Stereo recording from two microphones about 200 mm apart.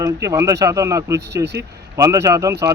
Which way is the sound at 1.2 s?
60° right (ahead or behind).